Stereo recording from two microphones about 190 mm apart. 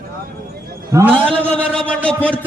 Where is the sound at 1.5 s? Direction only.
5° left (ahead or behind).